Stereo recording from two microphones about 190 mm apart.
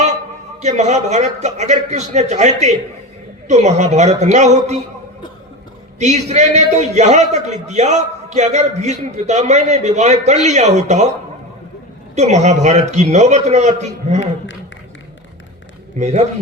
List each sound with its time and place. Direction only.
0.6 s a man's voice: 40° right (ahead or behind)
6.0 s a man's voice: 35° right (ahead or behind)
12.1 s a man's voice: 35° right (ahead or behind)
16.0 s a man's voice: 35° right (ahead or behind)